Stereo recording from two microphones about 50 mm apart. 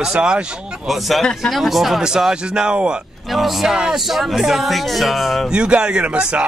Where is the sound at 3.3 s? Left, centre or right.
Centre.